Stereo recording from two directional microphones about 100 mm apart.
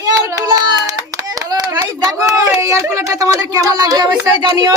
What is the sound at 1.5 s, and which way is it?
Clapping, 40° right (ahead or behind).